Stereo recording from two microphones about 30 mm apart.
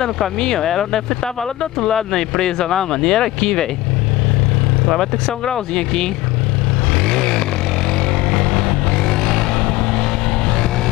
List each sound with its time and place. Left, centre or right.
0.4 s speech: centre
1.2 s speech: left
5.5 s speech: centre
7.1 s vehicle: centre
8.3 s a sound: centre